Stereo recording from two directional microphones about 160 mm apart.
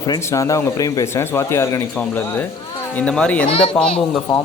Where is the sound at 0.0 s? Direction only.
25° left (ahead or behind).